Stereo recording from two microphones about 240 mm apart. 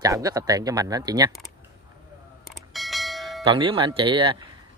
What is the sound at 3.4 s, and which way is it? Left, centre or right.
Speech, right.